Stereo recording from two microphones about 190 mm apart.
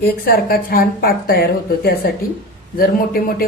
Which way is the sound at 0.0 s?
50° left (ahead or behind).